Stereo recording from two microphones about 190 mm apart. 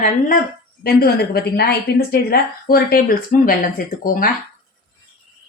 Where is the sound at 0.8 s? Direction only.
55° left (ahead or behind).